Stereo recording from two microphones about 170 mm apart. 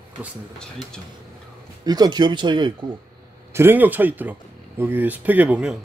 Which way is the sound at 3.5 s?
15° right (ahead or behind).